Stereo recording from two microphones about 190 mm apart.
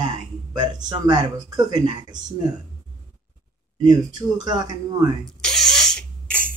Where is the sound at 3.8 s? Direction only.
20° right (ahead or behind).